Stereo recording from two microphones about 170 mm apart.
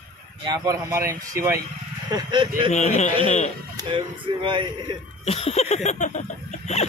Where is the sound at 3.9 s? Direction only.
30° right (ahead or behind).